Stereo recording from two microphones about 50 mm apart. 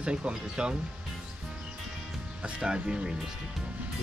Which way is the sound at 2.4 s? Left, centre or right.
Centre.